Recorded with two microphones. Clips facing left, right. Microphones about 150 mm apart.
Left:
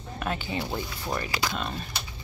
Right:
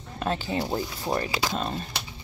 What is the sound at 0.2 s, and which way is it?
Speech, 35° right (ahead or behind).